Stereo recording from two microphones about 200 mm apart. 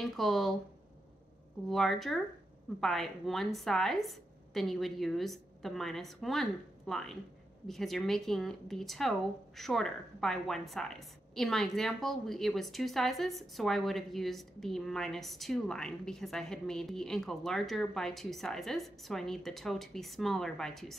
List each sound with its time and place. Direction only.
0.0 s speech: centre (ahead or behind)
1.7 s speech: centre (ahead or behind)